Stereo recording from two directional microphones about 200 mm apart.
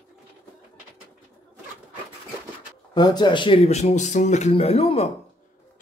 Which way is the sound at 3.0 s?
20° left (ahead or behind).